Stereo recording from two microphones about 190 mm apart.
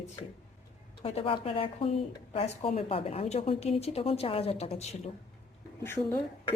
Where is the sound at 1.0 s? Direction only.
30° left (ahead or behind).